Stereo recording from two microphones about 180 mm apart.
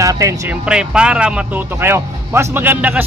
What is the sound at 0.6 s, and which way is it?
A man's voice, 5° right (ahead or behind).